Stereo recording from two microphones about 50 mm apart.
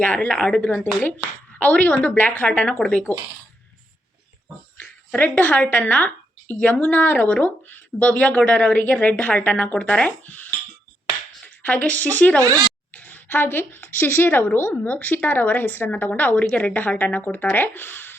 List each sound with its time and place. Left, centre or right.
0.0 s speech: left
0.3 s a woman's voice: centre
1.5 s a woman's voice: left
2.1 s a woman's voice: left
4.8 s speech: left
11.4 s a sound: left
12.1 s speech: left
15.9 s a woman's voice: left
17.5 s speech: left